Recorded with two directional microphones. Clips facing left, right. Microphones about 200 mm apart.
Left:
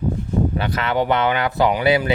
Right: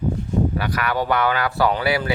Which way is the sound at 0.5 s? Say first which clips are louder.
Left 2 dB; 25° left (ahead or behind).